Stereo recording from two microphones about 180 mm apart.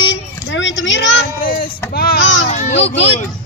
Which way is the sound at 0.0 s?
90° left.